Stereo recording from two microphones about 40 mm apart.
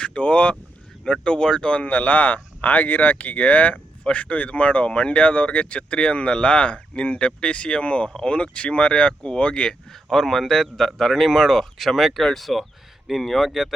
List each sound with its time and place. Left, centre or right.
0.0 s speech: left
1.0 s speech: left
1.9 s speech: left
9.9 s a man's voice: centre
12.1 s speech: centre